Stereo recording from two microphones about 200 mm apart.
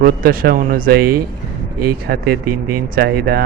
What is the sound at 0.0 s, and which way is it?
Speech, 45° right (ahead or behind).